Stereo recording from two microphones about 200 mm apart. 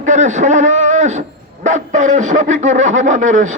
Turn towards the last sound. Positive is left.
turn(degrees=-40)  # may be behind; listen again after turning